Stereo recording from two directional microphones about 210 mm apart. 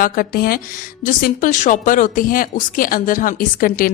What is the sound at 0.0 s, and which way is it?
Speech, 45° left (ahead or behind).